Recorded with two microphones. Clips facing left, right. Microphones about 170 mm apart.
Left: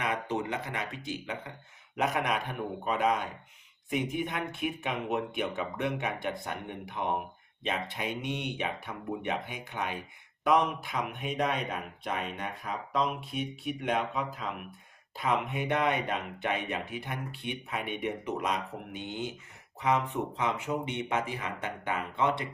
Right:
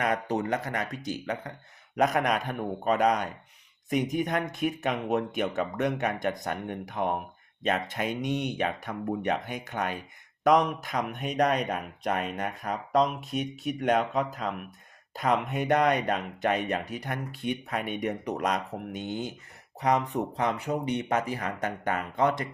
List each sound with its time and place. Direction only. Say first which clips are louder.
0.0 s speech: right 4 dB; 45° right (ahead or behind)